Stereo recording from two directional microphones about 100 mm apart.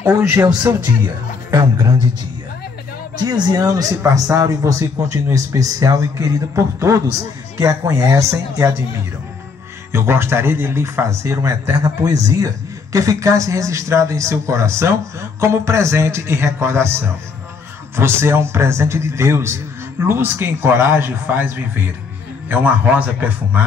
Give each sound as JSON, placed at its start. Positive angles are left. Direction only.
{"t": 0.0, "sound": "a man's voice", "side_deg": -25}
{"t": 1.5, "sound": "speech", "side_deg": -35}
{"t": 3.3, "sound": "speech", "side_deg": -40}
{"t": 9.9, "sound": "a man's voice", "side_deg": -25}
{"t": 11.7, "sound": "a man's voice", "side_deg": -40}